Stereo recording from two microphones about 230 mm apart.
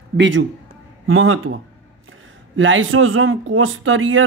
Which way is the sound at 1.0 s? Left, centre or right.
Right.